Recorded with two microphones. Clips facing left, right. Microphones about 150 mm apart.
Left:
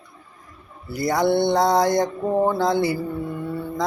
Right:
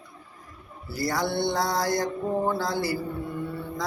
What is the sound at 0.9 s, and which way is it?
Mantra, 20° left (ahead or behind).